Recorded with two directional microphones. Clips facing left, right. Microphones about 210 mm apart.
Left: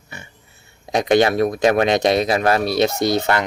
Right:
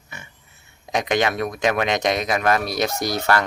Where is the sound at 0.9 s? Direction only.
35° left (ahead or behind).